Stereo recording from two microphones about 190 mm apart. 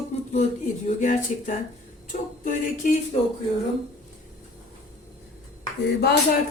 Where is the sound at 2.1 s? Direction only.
40° left (ahead or behind).